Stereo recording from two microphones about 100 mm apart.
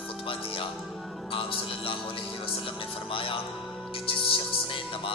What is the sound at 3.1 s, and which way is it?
A man's voice, 60° left (ahead or behind).